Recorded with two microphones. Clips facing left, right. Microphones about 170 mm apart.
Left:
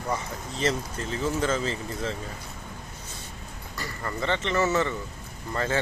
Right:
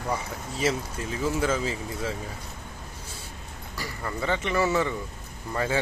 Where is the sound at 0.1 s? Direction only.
5° right (ahead or behind).